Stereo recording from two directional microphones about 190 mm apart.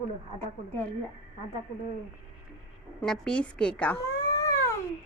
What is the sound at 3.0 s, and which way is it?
A woman's voice, 5° left (ahead or behind).